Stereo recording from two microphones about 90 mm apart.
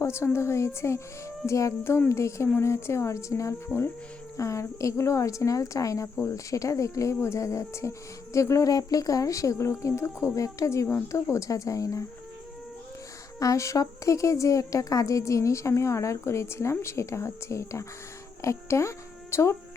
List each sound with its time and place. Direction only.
0.0 s a woman's voice: 35° left (ahead or behind)
13.4 s a woman's voice: 35° left (ahead or behind)